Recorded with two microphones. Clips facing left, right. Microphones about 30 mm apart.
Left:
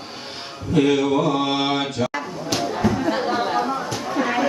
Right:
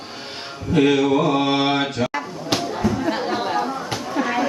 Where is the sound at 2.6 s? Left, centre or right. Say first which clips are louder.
Left 1 dB; centre.